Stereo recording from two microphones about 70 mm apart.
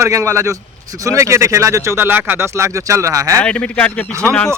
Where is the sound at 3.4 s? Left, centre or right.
Centre.